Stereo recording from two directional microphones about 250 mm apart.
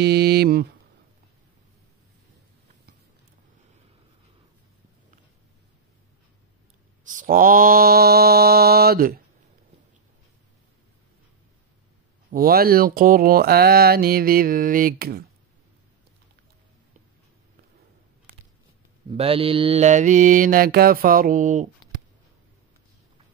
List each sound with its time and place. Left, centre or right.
0.0 s speech: right
7.1 s speech: right
12.3 s speech: right
19.0 s speech: right